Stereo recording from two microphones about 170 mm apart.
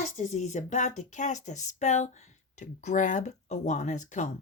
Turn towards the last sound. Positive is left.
turn(degrees=45)  # may be behind; listen again after turning